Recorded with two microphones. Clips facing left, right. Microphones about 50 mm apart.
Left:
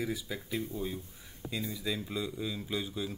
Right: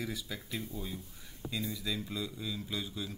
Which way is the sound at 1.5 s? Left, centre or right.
Centre.